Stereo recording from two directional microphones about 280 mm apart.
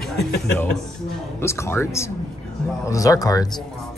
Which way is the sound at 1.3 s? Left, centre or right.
Centre.